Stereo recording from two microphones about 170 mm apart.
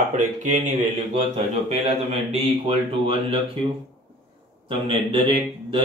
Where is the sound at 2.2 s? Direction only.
35° right (ahead or behind).